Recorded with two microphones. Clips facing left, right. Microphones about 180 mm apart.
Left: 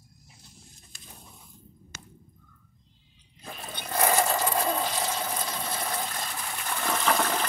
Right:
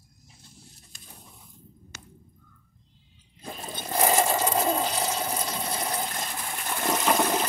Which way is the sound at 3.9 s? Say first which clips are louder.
Right 1 dB; 20° right (ahead or behind).